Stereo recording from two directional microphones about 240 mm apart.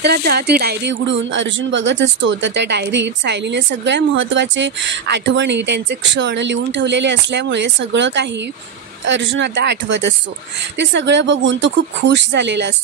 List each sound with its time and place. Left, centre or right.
0.0 s a woman's voice: right